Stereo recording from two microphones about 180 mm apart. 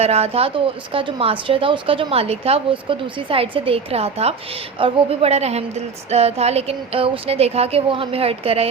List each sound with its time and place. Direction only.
0.0 s a woman's voice: 35° right (ahead or behind)